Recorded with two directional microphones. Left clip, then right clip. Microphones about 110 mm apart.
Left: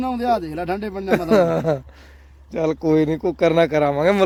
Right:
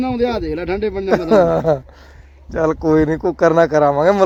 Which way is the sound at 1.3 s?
25° left (ahead or behind).